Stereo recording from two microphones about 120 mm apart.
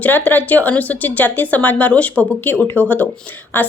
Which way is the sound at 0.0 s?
15° left (ahead or behind).